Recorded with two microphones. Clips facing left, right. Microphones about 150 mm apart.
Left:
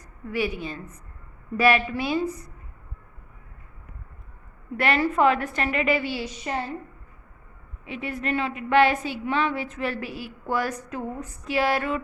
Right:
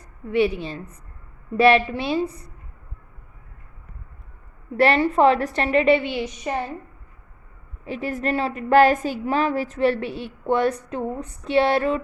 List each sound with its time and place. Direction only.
0.3 s a woman's voice: 30° right (ahead or behind)
4.8 s a woman's voice: 30° right (ahead or behind)
7.9 s a woman's voice: 35° right (ahead or behind)